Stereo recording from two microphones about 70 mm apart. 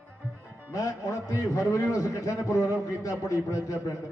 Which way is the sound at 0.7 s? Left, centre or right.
Left.